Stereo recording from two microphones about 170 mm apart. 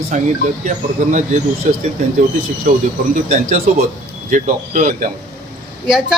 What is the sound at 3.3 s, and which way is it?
Speech, 40° right (ahead or behind).